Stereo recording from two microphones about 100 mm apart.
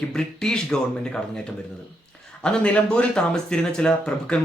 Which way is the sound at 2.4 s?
10° left (ahead or behind).